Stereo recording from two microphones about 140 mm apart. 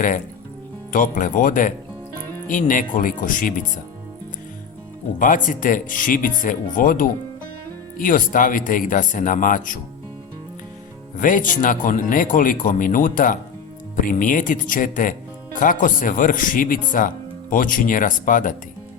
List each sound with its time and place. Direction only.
0.9 s speech: 70° left (ahead or behind)
5.2 s speech: 70° left (ahead or behind)
11.2 s speech: 70° left (ahead or behind)